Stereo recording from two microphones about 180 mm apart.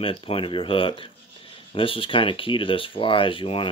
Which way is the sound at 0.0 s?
30° left (ahead or behind).